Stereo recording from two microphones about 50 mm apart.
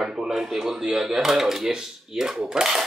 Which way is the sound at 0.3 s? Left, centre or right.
Centre.